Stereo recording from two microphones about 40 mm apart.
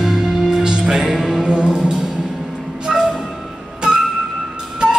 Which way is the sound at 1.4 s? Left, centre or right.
Right.